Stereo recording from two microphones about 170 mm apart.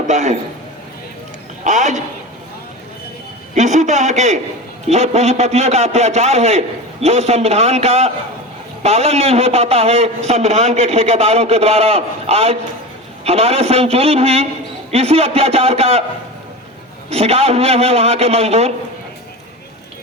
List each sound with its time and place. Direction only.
0.1 s a man's voice: 45° right (ahead or behind)
1.6 s a sound: 45° right (ahead or behind)
3.5 s a man's voice: 45° right (ahead or behind)
17.1 s a man's voice: 35° right (ahead or behind)